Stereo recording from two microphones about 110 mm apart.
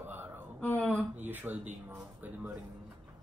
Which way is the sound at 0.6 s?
15° left (ahead or behind).